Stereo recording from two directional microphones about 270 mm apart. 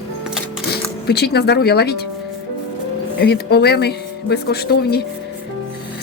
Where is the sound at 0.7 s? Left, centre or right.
Left.